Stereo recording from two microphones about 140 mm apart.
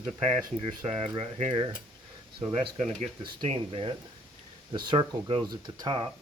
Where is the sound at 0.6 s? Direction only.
45° right (ahead or behind).